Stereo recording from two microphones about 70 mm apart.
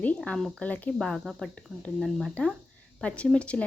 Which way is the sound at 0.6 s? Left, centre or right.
Left.